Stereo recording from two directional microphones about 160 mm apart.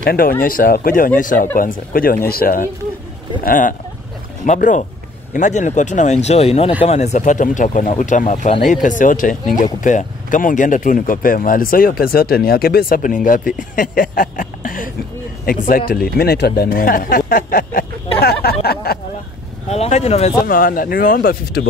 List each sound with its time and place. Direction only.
0.0 s speech: 65° left (ahead or behind)
13.7 s a sound: 55° left (ahead or behind)
15.4 s speech: 60° left (ahead or behind)
18.2 s speech: 75° left (ahead or behind)
19.7 s speech: 40° left (ahead or behind)
20.4 s speech: 60° left (ahead or behind)